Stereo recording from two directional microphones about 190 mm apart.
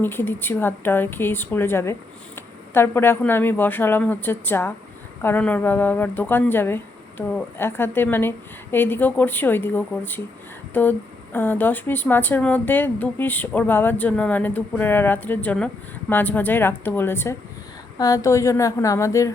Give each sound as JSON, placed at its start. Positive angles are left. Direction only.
{"t": 0.0, "sound": "speech", "side_deg": 10}